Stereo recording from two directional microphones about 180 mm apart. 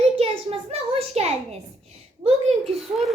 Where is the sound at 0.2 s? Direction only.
35° right (ahead or behind).